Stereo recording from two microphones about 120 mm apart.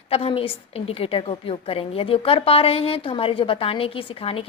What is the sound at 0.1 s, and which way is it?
A woman's voice, 55° left (ahead or behind).